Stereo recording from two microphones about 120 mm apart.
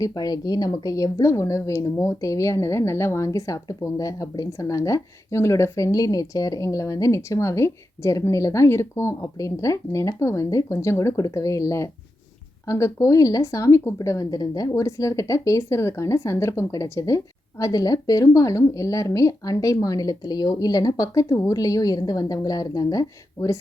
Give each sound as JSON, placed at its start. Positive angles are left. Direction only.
{"t": 0.0, "sound": "a woman's voice", "side_deg": 35}